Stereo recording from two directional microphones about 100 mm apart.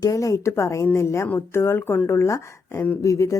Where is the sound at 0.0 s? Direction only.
35° left (ahead or behind).